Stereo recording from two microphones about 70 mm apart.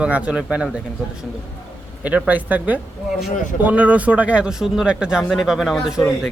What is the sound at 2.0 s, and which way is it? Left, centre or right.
A man's voice, right.